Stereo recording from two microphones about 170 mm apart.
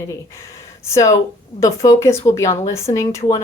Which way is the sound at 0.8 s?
15° left (ahead or behind).